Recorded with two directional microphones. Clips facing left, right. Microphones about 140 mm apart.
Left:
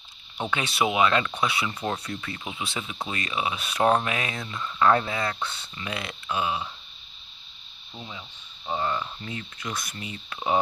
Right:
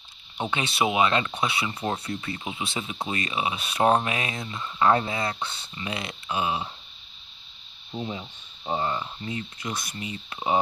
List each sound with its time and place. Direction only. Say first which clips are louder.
0.4 s speech: even; 25° right (ahead or behind)
7.9 s speech: right 8 dB; 35° right (ahead or behind)